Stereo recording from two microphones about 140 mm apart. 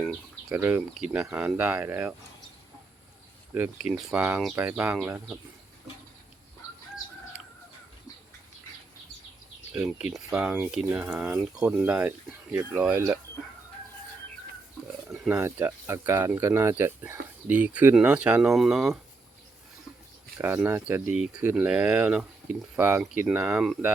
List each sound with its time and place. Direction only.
0.4 s speech: 15° right (ahead or behind)
0.8 s speech: 5° right (ahead or behind)
3.5 s speech: 10° right (ahead or behind)
9.7 s speech: 5° right (ahead or behind)
15.1 s wild animals: centre (ahead or behind)
15.4 s speech: 15° right (ahead or behind)
20.4 s speech: 15° right (ahead or behind)